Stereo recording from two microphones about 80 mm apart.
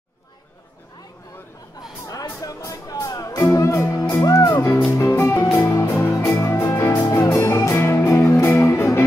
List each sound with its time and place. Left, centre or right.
1.8 s music: left
5.9 s music: left